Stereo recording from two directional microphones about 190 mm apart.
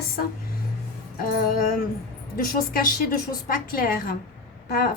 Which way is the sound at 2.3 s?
50° left (ahead or behind).